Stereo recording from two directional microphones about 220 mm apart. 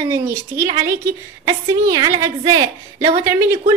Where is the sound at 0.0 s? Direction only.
10° right (ahead or behind).